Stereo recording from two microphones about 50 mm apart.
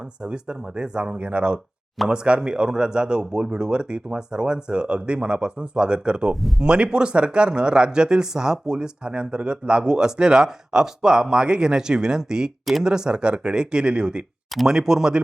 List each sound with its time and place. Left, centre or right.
0.2 s speech: centre